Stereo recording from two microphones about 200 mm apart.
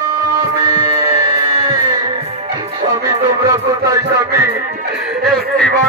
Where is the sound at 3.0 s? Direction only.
15° right (ahead or behind).